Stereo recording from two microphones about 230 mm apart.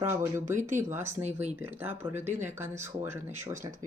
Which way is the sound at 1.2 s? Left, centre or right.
Right.